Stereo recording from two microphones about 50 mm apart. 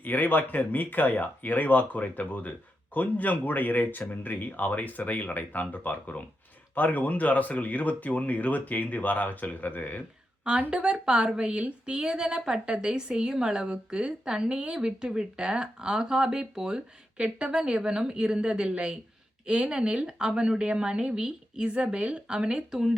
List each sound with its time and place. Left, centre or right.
0.0 s speech: left
10.7 s a woman's voice: centre